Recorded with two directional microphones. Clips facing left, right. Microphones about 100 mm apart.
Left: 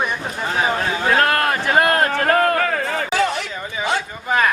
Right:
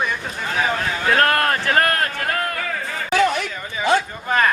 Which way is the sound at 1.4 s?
10° left (ahead or behind).